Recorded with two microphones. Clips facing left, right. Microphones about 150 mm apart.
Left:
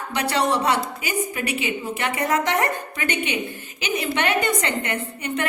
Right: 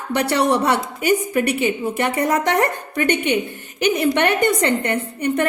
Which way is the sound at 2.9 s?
55° right (ahead or behind).